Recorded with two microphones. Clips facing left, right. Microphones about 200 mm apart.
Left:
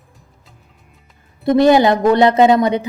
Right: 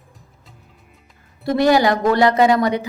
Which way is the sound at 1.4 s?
20° left (ahead or behind).